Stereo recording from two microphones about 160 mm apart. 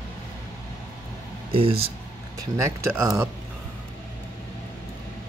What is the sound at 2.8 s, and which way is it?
Speech, 20° right (ahead or behind).